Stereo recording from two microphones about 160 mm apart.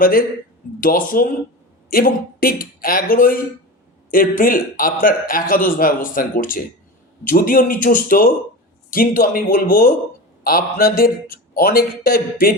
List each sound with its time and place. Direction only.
0.0 s a man's voice: 60° left (ahead or behind)